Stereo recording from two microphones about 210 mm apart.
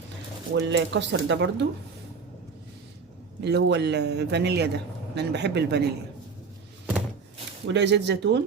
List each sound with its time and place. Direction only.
0.5 s speech: 60° right (ahead or behind)
3.4 s speech: 55° right (ahead or behind)
7.7 s speech: 55° right (ahead or behind)